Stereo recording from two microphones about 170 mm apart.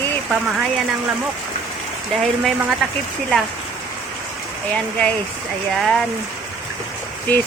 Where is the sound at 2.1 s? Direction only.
Centre (ahead or behind).